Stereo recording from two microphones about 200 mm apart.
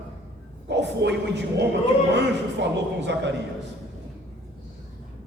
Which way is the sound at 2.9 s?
60° right (ahead or behind).